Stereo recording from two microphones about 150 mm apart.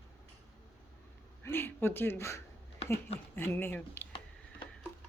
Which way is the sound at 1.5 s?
15° left (ahead or behind).